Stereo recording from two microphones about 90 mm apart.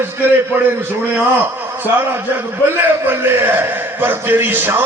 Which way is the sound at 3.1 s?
25° right (ahead or behind).